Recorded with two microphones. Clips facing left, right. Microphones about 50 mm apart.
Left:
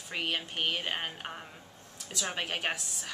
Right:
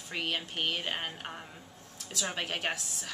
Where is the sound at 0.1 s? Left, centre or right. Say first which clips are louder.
Left 1 dB; centre.